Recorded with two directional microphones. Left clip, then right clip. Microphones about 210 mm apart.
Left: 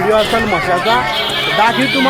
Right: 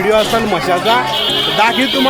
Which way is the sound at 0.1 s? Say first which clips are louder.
Right 1 dB; 5° right (ahead or behind).